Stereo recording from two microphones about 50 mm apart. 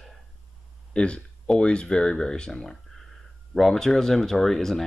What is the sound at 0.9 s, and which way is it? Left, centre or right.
Speech, left.